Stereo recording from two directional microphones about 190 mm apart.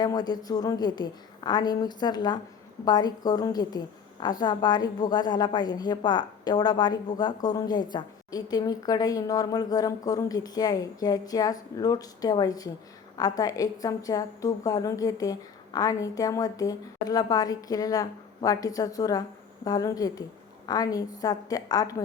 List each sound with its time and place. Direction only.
0.0 s a woman's voice: 20° left (ahead or behind)